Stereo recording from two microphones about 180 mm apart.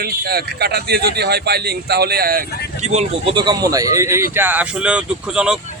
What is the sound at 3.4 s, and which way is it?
Speech, 20° right (ahead or behind).